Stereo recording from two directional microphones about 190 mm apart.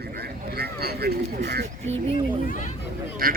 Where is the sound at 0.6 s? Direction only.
55° right (ahead or behind).